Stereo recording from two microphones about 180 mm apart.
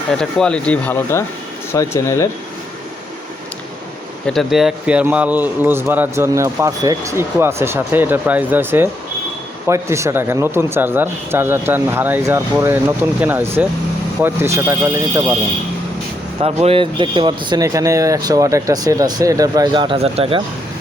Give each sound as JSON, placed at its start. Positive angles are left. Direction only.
{"t": 0.1, "sound": "speech", "side_deg": 5}
{"t": 4.3, "sound": "speech", "side_deg": 0}
{"t": 16.4, "sound": "speech", "side_deg": -35}